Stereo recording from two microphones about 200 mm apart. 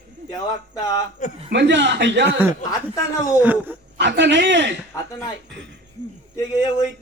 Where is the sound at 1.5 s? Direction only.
60° right (ahead or behind).